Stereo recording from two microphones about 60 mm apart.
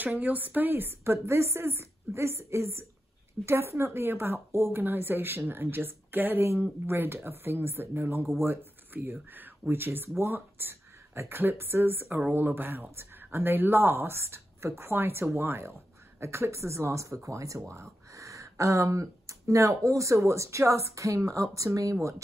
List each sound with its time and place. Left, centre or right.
0.2 s a woman's voice: right
17.6 s speech: right